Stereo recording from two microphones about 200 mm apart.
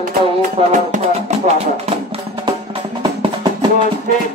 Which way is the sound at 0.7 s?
35° right (ahead or behind).